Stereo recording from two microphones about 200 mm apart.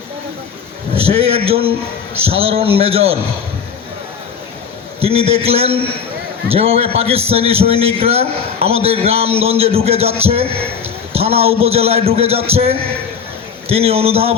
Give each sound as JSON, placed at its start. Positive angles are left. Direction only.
{"t": 0.9, "sound": "a man's voice", "side_deg": -30}
{"t": 4.9, "sound": "a man's voice", "side_deg": -30}